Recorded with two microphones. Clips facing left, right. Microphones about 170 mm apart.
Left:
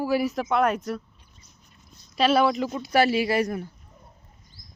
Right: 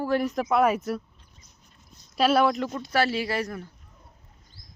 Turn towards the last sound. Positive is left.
turn(degrees=15)  # may be behind; listen again after turning